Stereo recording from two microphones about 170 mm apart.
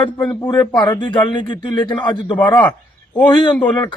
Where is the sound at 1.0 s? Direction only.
30° left (ahead or behind).